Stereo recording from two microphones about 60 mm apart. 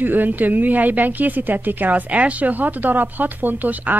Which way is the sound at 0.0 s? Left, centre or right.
Right.